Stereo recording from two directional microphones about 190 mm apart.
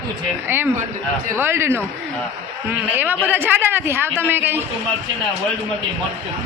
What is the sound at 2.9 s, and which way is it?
Speech, 10° right (ahead or behind).